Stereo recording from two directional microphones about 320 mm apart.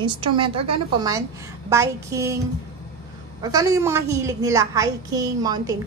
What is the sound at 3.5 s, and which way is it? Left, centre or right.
A woman's voice, centre.